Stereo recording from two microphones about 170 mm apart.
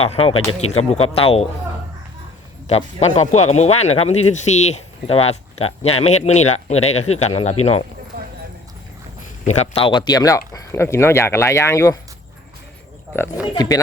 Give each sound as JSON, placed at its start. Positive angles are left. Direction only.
{"t": 0.0, "sound": "speech", "side_deg": 35}
{"t": 2.6, "sound": "speech", "side_deg": 40}
{"t": 9.5, "sound": "speech", "side_deg": 35}
{"t": 13.5, "sound": "speech", "side_deg": 20}